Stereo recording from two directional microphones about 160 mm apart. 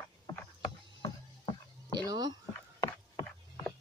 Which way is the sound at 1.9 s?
25° right (ahead or behind).